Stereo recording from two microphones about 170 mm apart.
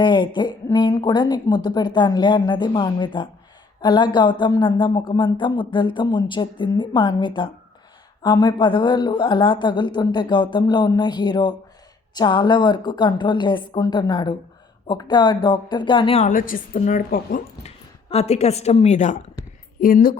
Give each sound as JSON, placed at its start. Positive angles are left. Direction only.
{"t": 0.0, "sound": "speech", "side_deg": 25}
{"t": 16.2, "sound": "a woman's voice", "side_deg": 50}
{"t": 18.1, "sound": "a woman's voice", "side_deg": 40}
{"t": 19.8, "sound": "a woman's voice", "side_deg": 55}